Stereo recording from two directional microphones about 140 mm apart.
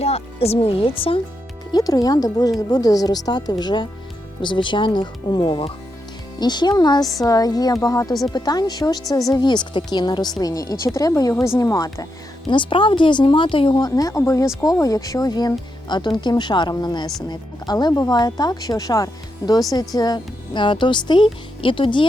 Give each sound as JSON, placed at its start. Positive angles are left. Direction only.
{"t": 0.0, "sound": "speech", "side_deg": 45}
{"t": 1.7, "sound": "a woman's voice", "side_deg": 25}
{"t": 12.5, "sound": "a woman's voice", "side_deg": 35}